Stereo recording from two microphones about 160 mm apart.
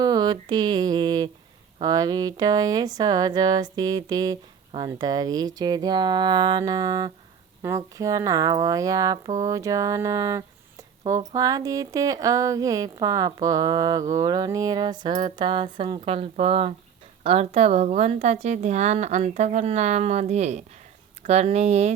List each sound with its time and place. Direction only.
0.0 s a woman's voice: 25° right (ahead or behind); by 21.9 s 45° right (ahead or behind)